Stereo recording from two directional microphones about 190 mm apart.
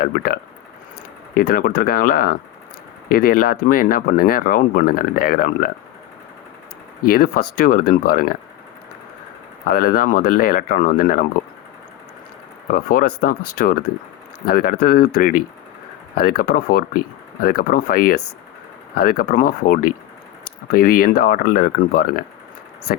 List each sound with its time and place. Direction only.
0.0 s speech: 50° left (ahead or behind)
1.4 s speech: 50° left (ahead or behind)
7.1 s speech: 50° left (ahead or behind)
9.6 s speech: 50° left (ahead or behind)
12.6 s speech: 50° left (ahead or behind)